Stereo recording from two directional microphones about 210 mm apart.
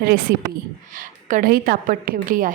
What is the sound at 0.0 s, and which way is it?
A woman's voice, 45° right (ahead or behind).